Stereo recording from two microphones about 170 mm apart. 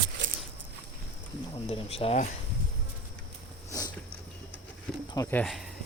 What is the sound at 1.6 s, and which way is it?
Speech, 35° left (ahead or behind).